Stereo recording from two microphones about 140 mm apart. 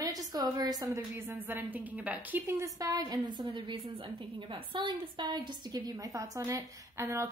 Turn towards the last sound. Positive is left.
turn(degrees=-20)  # may be behind; listen again after turning